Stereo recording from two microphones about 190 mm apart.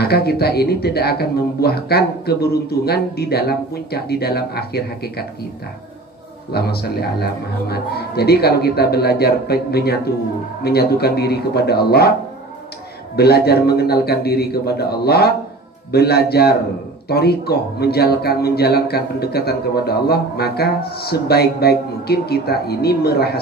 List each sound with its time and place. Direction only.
0.0 s a man's voice: 55° left (ahead or behind)
6.5 s a man's voice: 55° left (ahead or behind)
13.1 s a man's voice: 55° left (ahead or behind)